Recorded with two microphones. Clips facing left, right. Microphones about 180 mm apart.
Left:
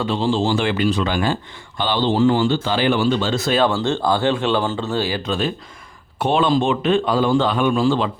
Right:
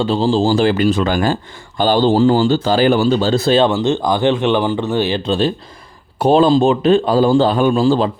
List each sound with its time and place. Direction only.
0.0 s a man's voice: 35° right (ahead or behind)